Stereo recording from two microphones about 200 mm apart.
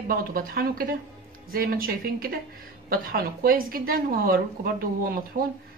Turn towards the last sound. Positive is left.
turn(degrees=-45)  # may be behind; listen again after turning